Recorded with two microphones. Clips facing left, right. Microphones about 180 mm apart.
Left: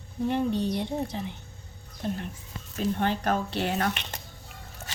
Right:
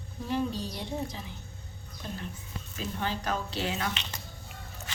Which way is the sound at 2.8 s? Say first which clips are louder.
Left 7 dB; 55° left (ahead or behind).